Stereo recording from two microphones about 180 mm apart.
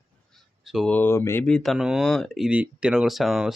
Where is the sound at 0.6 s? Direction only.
Centre (ahead or behind).